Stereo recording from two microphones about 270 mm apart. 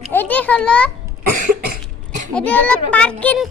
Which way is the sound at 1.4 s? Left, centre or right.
Right.